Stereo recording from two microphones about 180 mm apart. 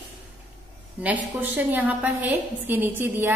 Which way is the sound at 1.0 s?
10° right (ahead or behind).